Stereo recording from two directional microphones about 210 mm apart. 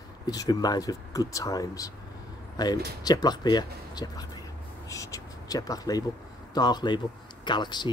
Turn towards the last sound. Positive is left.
turn(degrees=20)  # may be behind; listen again after turning